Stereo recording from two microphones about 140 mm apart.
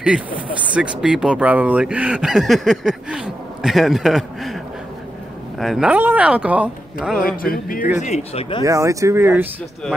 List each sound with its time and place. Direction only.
0.7 s speech: 5° right (ahead or behind)
5.6 s speech: centre (ahead or behind)
7.4 s speech: 85° left
8.0 s speech: 50° left (ahead or behind)
8.6 s speech: 20° right (ahead or behind)